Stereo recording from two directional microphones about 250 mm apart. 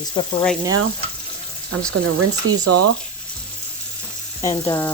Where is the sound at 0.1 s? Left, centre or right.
Centre.